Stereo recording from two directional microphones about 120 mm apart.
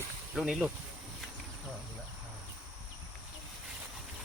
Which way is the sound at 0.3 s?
5° right (ahead or behind).